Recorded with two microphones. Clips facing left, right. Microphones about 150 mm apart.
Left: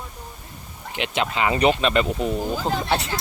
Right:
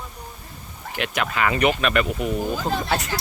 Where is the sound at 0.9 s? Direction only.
20° left (ahead or behind).